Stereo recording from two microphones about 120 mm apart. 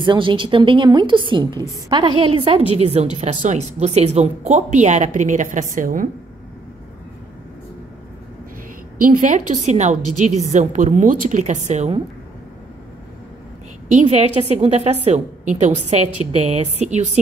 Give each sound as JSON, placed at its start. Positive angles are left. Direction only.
{"t": 0.0, "sound": "a woman's voice", "side_deg": -40}
{"t": 2.8, "sound": "a woman's voice", "side_deg": -65}
{"t": 3.2, "sound": "a woman's voice", "side_deg": -80}
{"t": 9.2, "sound": "a woman's voice", "side_deg": -90}
{"t": 9.7, "sound": "a woman's voice", "side_deg": -80}
{"t": 14.0, "sound": "a woman's voice", "side_deg": -65}
{"t": 15.0, "sound": "a woman's voice", "side_deg": -70}
{"t": 16.3, "sound": "a woman's voice", "side_deg": -65}